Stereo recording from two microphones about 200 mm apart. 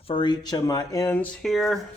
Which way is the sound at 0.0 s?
25° left (ahead or behind).